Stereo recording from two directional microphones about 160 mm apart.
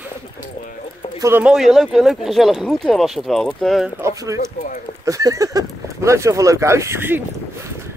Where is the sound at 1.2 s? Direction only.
15° right (ahead or behind).